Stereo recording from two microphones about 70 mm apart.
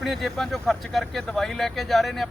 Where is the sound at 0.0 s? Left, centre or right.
Centre.